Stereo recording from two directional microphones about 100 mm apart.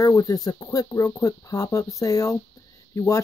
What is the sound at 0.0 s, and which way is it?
Speech, 40° left (ahead or behind).